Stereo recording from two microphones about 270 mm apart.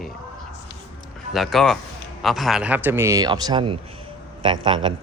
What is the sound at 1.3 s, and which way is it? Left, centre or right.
Speech, centre.